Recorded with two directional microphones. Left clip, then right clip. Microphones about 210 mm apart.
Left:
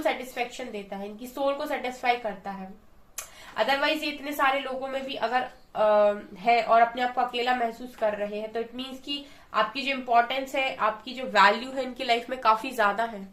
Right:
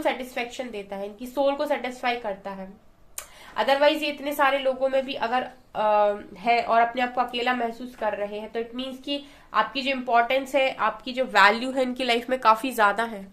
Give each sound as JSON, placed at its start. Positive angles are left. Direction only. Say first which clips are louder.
{"t": 0.0, "sound": "a woman's voice", "louder": "right 1 dB", "side_deg": -50}
{"t": 3.5, "sound": "a woman's voice", "louder": "right 4 dB", "side_deg": -45}
{"t": 8.5, "sound": "a woman's voice", "louder": "right 2 dB", "side_deg": -45}